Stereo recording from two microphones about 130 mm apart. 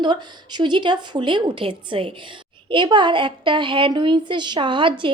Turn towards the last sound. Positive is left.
turn(degrees=-40)  # may be behind; listen again after turning